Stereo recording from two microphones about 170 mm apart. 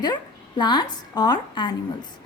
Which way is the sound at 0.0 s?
25° left (ahead or behind).